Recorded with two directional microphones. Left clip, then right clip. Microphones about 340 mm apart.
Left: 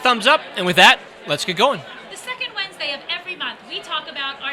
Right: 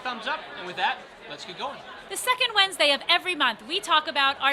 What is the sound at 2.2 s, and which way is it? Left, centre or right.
A woman's voice, right.